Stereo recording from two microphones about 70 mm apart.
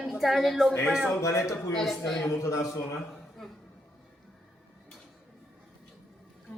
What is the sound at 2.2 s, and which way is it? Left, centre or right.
Speech, left.